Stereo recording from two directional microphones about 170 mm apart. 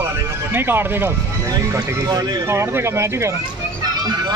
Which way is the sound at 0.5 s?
10° right (ahead or behind).